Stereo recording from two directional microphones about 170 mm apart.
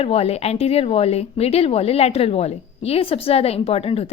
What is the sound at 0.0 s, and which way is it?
A woman's voice, 35° left (ahead or behind).